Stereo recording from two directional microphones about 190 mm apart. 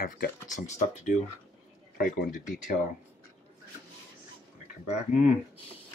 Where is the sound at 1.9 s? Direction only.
50° left (ahead or behind).